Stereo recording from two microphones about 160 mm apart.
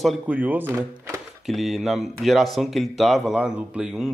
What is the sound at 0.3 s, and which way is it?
Speech, 10° right (ahead or behind).